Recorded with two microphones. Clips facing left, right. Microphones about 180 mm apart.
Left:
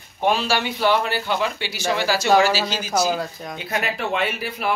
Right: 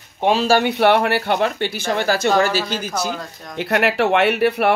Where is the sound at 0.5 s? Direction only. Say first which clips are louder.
Right 6 dB; 55° right (ahead or behind).